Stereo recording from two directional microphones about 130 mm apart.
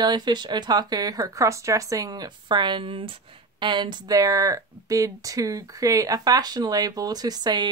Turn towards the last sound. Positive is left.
turn(degrees=-35)  # may be behind; listen again after turning